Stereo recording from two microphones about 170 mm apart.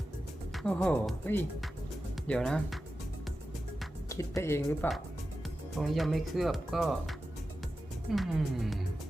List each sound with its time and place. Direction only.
0.5 s speech: 5° left (ahead or behind)
4.1 s speech: 20° left (ahead or behind)
5.8 s speech: centre (ahead or behind)